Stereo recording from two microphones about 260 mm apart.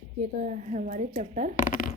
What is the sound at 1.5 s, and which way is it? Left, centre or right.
Speech, left.